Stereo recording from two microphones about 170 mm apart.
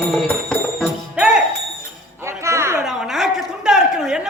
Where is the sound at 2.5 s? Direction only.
15° right (ahead or behind).